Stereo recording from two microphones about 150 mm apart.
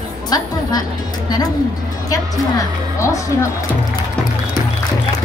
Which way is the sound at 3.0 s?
20° left (ahead or behind).